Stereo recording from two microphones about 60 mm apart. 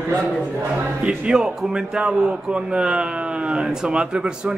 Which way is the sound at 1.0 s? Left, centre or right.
Centre.